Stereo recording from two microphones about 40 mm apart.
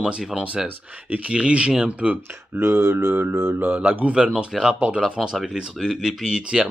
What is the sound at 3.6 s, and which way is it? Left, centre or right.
Speech, right.